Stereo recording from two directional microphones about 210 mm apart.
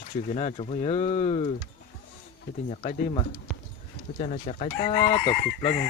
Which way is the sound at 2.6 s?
30° left (ahead or behind).